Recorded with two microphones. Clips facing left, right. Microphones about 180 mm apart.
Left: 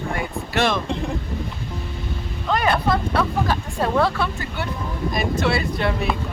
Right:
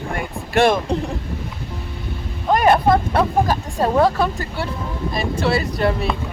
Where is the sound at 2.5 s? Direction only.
45° right (ahead or behind).